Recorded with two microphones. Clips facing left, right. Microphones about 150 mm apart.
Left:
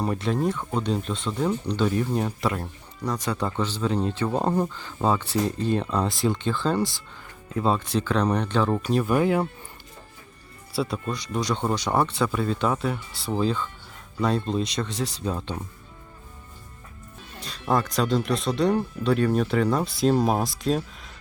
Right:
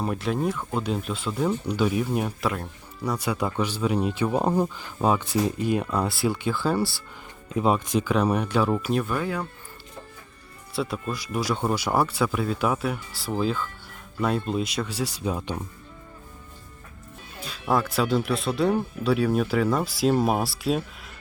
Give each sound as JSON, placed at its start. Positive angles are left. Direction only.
{"t": 0.0, "sound": "speech", "side_deg": 0}
{"t": 9.0, "sound": "speech", "side_deg": 20}
{"t": 10.8, "sound": "speech", "side_deg": 0}
{"t": 17.4, "sound": "speech", "side_deg": -5}